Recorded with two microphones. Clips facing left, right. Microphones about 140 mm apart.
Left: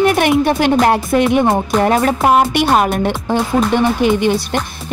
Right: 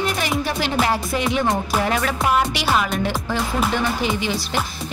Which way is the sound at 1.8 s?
45° left (ahead or behind).